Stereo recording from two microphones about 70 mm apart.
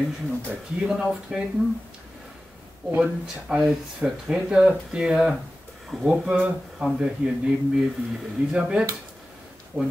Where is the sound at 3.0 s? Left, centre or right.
Centre.